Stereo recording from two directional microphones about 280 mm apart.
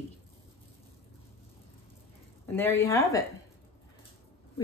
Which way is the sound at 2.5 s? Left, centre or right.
Centre.